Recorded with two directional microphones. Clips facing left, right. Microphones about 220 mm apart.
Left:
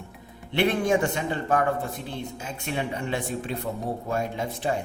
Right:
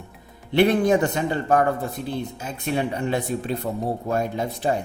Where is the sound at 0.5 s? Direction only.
40° right (ahead or behind).